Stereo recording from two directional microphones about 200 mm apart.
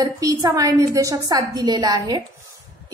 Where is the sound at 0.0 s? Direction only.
20° right (ahead or behind).